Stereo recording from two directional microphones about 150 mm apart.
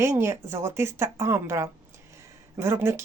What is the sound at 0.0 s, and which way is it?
Speech, 20° right (ahead or behind).